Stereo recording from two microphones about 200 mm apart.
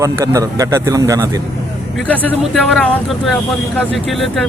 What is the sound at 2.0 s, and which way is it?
Speech, 10° left (ahead or behind).